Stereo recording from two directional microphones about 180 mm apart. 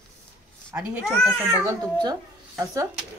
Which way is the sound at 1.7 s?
20° right (ahead or behind).